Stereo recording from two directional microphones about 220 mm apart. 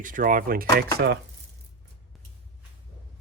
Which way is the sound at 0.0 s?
40° right (ahead or behind).